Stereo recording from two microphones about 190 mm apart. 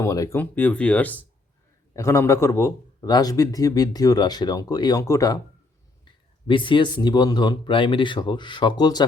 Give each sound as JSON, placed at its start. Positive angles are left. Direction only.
{"t": 0.0, "sound": "a man's voice", "side_deg": 15}
{"t": 6.5, "sound": "a man's voice", "side_deg": 25}